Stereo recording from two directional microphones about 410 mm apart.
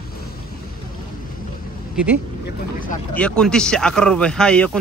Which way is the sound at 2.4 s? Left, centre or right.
Centre.